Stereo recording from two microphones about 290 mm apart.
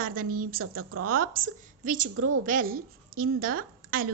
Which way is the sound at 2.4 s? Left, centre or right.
Right.